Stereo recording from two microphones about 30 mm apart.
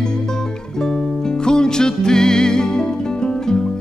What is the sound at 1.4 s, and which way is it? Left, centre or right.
Music, left.